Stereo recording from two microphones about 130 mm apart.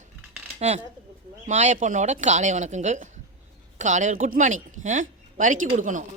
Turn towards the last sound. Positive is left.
turn(degrees=-80)